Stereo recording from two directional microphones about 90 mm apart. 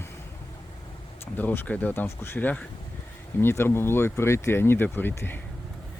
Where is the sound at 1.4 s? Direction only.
20° left (ahead or behind).